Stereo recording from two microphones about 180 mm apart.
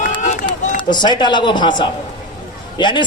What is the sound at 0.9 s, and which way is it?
Speech, 25° left (ahead or behind).